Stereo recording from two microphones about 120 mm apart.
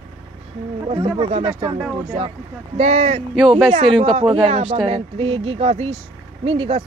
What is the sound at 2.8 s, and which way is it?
Speech, 65° right (ahead or behind).